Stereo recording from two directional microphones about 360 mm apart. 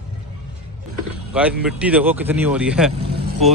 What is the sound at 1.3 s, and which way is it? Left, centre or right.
Speech, centre.